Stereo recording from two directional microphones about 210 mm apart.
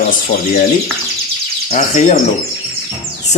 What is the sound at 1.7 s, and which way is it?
Speech, 35° left (ahead or behind).